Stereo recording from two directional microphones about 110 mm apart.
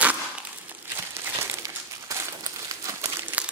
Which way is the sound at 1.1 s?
25° right (ahead or behind).